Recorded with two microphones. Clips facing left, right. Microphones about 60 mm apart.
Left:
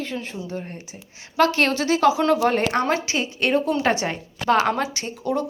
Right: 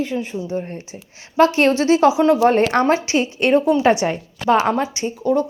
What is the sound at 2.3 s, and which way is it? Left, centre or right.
Speech, right.